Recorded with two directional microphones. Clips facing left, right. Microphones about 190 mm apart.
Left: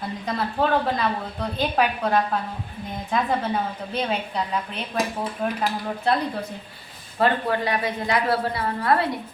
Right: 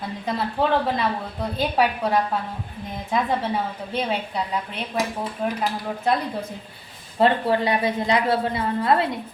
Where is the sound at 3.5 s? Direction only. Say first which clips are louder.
Even; 5° right (ahead or behind).